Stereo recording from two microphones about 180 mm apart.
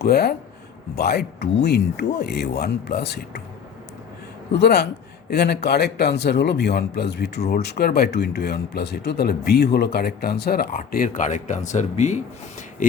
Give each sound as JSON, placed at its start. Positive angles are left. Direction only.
{"t": 0.0, "sound": "speech", "side_deg": 65}
{"t": 4.5, "sound": "speech", "side_deg": 65}